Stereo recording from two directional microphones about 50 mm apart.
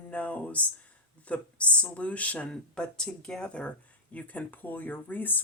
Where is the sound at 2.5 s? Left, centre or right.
Centre.